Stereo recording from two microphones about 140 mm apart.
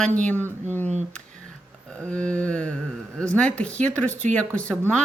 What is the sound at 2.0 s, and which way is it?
Speech, 10° left (ahead or behind).